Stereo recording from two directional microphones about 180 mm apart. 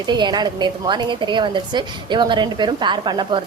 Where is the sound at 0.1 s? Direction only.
25° right (ahead or behind).